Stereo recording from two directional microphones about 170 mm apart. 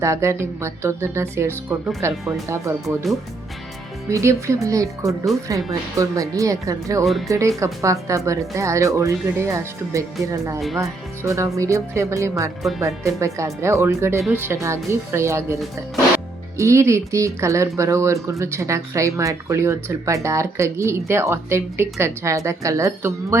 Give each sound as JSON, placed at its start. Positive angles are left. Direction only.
{"t": 0.0, "sound": "speech", "side_deg": -15}
{"t": 4.1, "sound": "speech", "side_deg": -15}